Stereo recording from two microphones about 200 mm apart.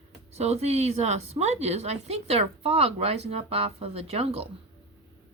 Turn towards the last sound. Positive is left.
turn(degrees=-30)  # may be behind; listen again after turning